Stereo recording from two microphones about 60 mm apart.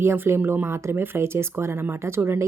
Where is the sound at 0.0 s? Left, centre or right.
Right.